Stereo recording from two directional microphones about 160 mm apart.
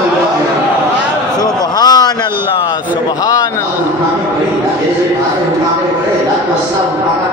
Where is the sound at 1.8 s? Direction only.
25° left (ahead or behind).